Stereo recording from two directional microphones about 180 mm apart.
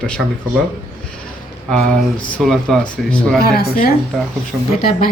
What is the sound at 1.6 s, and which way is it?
Speech, 5° left (ahead or behind).